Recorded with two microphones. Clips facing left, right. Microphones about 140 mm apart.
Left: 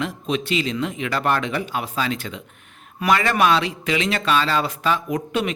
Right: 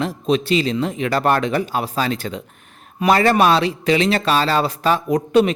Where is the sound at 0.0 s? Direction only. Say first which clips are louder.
Right 5 dB; 35° right (ahead or behind).